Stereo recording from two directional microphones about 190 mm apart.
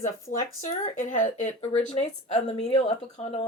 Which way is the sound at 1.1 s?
40° left (ahead or behind).